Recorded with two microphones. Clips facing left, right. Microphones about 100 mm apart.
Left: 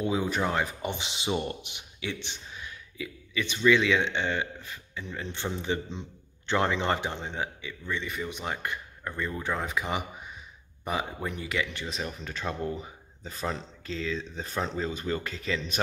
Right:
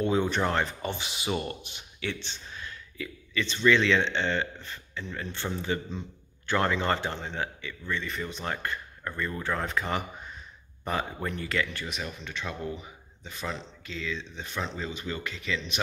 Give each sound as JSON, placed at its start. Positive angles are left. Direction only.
{"t": 0.0, "sound": "speech", "side_deg": 5}
{"t": 11.9, "sound": "speech", "side_deg": 30}